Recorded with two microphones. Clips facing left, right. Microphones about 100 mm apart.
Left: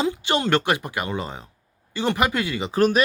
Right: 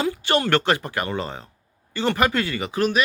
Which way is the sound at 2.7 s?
35° left (ahead or behind).